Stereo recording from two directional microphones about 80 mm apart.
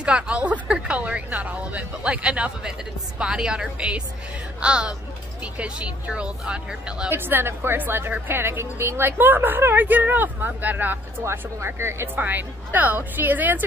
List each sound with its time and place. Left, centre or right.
0.0 s speech: centre
7.1 s a woman's voice: right
11.2 s speech: right
12.2 s a woman's voice: right